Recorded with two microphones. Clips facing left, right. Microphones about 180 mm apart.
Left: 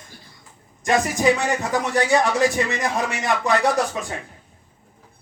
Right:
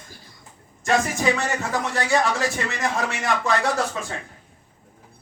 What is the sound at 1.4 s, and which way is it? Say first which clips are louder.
A man's voice: left 3 dB; 15° left (ahead or behind).